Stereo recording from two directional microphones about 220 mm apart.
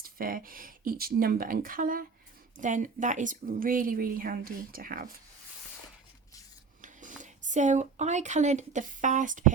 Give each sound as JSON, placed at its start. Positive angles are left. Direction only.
{"t": 0.0, "sound": "a woman's voice", "side_deg": -40}
{"t": 6.8, "sound": "speech", "side_deg": -35}